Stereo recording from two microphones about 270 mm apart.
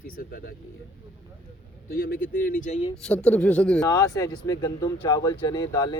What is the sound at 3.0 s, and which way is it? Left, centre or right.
Speech, centre.